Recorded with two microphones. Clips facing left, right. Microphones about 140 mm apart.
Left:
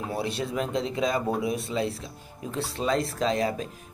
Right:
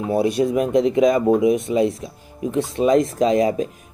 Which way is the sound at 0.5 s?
15° right (ahead or behind).